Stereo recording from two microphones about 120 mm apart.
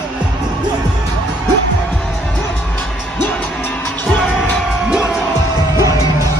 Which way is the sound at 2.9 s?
5° right (ahead or behind).